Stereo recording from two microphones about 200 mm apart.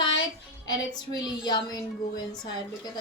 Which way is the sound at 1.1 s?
20° left (ahead or behind).